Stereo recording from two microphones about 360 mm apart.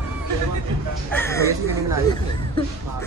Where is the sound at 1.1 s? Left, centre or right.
Centre.